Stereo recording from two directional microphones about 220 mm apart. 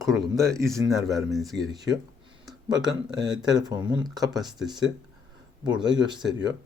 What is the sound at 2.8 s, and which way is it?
Speech, 20° right (ahead or behind).